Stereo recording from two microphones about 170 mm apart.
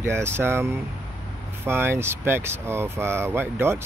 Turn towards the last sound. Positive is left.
turn(degrees=-15)  # may be behind; listen again after turning